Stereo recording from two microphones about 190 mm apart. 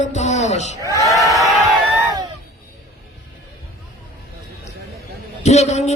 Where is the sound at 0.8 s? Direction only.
15° right (ahead or behind).